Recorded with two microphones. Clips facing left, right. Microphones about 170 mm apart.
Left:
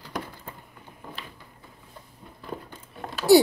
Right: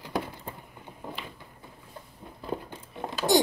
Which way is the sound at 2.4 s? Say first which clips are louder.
Right 3 dB; 20° right (ahead or behind).